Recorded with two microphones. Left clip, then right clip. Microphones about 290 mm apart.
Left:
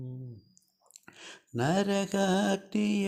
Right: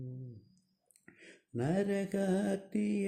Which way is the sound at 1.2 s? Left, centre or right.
Centre.